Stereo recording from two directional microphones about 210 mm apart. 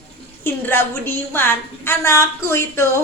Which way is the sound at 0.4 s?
10° left (ahead or behind).